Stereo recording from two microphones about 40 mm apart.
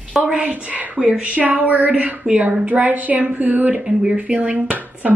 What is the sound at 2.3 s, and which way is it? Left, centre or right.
Speech, right.